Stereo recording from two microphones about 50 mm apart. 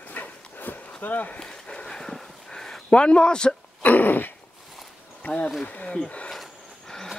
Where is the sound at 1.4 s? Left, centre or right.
Centre.